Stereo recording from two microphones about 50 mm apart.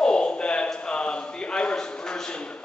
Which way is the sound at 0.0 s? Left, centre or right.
Centre.